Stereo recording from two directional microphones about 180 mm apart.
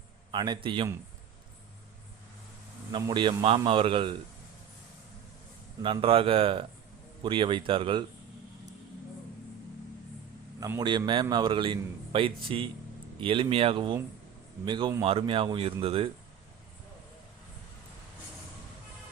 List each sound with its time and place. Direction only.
0.3 s a man's voice: 25° right (ahead or behind)
2.9 s a man's voice: 25° right (ahead or behind)
5.8 s a man's voice: 30° right (ahead or behind)
10.6 s a man's voice: 20° right (ahead or behind)